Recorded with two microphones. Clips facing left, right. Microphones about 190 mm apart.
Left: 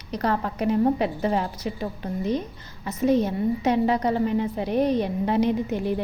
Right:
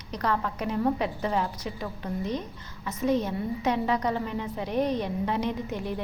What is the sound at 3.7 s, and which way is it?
Speech, 35° left (ahead or behind).